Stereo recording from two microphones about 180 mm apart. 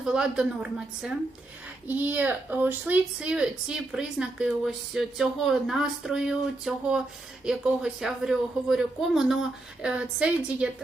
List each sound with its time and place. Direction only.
0.0 s speech: 5° right (ahead or behind)